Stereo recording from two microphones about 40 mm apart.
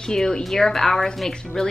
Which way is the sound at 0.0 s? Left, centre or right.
Centre.